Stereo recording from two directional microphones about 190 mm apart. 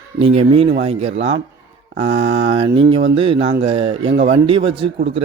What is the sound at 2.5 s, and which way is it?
Speech, 25° right (ahead or behind).